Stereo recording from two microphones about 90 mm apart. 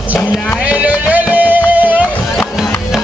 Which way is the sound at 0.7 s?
15° right (ahead or behind).